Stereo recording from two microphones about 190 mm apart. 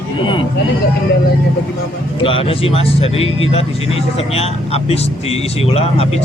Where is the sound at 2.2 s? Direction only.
30° left (ahead or behind).